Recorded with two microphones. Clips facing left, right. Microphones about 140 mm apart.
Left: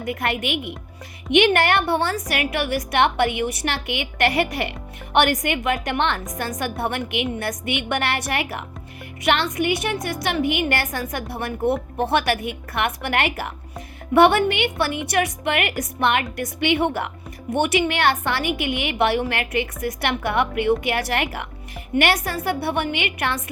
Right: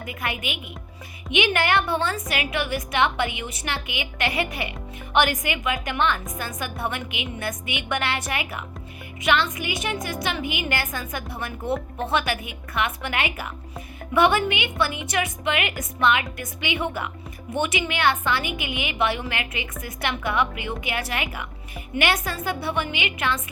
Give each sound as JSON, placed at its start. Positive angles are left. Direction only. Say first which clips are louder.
{"t": 0.0, "sound": "a woman's voice", "louder": "left 6 dB", "side_deg": 70}